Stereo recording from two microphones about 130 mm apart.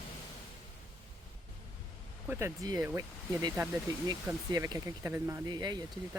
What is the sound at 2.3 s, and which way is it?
Speech, 20° right (ahead or behind).